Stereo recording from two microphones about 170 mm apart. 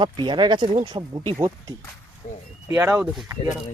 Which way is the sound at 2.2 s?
45° left (ahead or behind).